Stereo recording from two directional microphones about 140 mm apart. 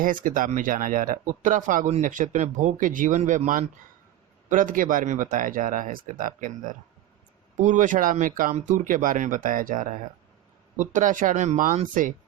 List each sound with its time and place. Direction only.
0.0 s speech: 75° right (ahead or behind)